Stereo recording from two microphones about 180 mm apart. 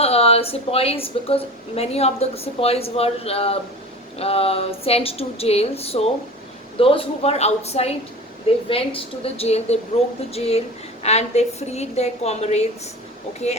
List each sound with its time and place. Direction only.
0.0 s a woman's voice: 35° left (ahead or behind)